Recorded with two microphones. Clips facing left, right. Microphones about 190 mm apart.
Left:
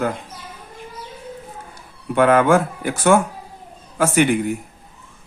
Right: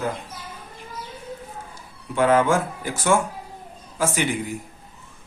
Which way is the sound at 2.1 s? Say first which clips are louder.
Left 4 dB; 60° left (ahead or behind).